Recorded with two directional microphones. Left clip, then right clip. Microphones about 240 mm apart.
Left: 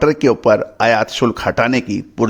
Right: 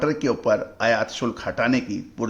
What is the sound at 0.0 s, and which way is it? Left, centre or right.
Speech, left.